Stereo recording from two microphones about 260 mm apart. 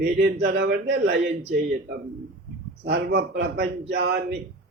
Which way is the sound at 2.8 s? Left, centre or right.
Right.